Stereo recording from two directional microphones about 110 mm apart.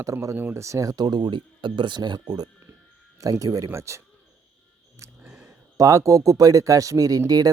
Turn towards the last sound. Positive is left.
turn(degrees=-35)  # may be behind; listen again after turning